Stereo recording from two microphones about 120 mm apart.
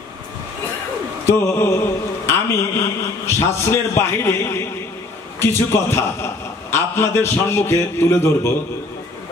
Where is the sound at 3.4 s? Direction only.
20° left (ahead or behind).